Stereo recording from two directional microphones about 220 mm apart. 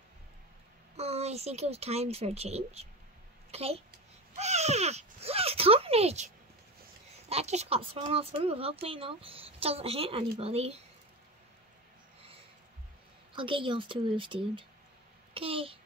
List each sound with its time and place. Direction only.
0.9 s speech: 30° right (ahead or behind)
4.4 s a sound: 30° right (ahead or behind)
7.2 s speech: 30° right (ahead or behind)
13.4 s a child's voice: 25° right (ahead or behind)